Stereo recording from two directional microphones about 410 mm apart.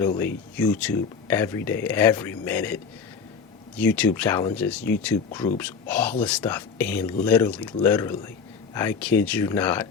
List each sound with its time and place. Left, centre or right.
0.6 s speech: centre
3.8 s speech: centre